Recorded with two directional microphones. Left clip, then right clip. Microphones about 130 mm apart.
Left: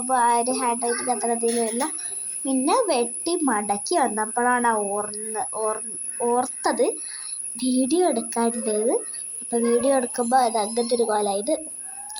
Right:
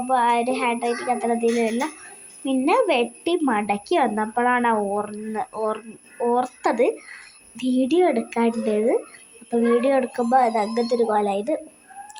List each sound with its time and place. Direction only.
0.1 s speech: centre (ahead or behind)
10.8 s a child's voice: 15° left (ahead or behind)